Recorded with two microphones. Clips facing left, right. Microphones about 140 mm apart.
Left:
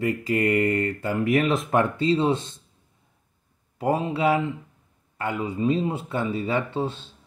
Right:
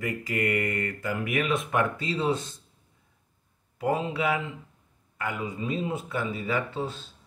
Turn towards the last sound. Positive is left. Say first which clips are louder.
# left 4 dB
turn(degrees=25)  # may be behind; listen again after turning